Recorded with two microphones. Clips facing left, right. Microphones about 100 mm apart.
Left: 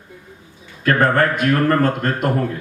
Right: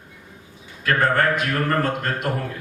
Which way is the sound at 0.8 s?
45° left (ahead or behind).